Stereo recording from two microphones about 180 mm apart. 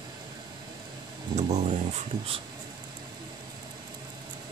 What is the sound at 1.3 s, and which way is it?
Speech, 40° right (ahead or behind).